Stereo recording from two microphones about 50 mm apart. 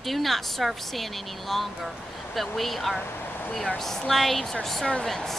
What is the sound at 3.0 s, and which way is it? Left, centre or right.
Vehicle, left.